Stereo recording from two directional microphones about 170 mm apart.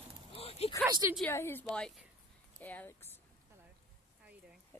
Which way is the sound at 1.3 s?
15° left (ahead or behind).